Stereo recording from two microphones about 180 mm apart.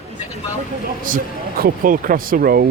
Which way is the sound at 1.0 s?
50° right (ahead or behind).